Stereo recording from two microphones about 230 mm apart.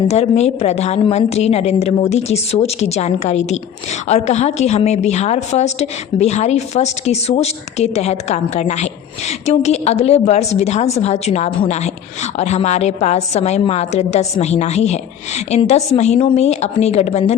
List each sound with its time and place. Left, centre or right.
0.1 s a woman's voice: left